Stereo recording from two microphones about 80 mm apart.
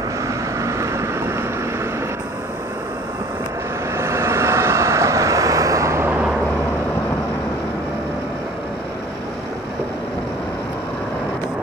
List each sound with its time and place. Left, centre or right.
0.6 s vehicle: right
3.9 s vehicle: right
6.0 s vehicle: centre